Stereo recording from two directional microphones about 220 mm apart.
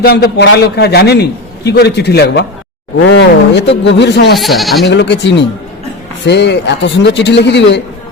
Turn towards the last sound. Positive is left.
turn(degrees=50)  # may be behind; listen again after turning